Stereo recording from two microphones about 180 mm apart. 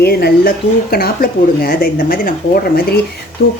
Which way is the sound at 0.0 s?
60° left (ahead or behind).